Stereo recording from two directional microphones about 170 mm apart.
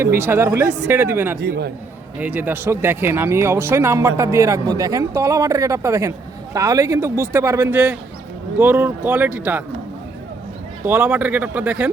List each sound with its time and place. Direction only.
0.0 s speech: 15° right (ahead or behind)
1.4 s a man's voice: 75° right (ahead or behind)
2.1 s speech: 10° right (ahead or behind)
10.8 s speech: 10° right (ahead or behind)